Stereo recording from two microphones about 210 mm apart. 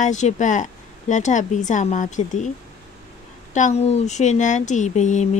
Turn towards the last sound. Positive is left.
turn(degrees=35)  # may be behind; listen again after turning